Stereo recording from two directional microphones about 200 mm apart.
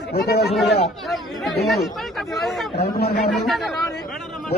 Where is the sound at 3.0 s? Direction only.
55° left (ahead or behind).